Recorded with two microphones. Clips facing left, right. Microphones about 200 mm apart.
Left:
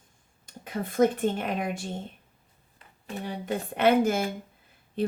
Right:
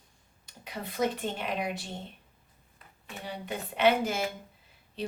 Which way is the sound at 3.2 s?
50° left (ahead or behind).